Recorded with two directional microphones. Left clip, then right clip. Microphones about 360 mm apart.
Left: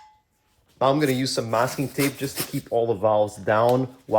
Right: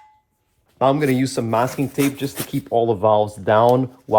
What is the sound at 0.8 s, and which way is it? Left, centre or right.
Speech, right.